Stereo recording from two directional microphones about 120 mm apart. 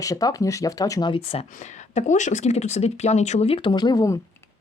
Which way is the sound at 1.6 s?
90° left.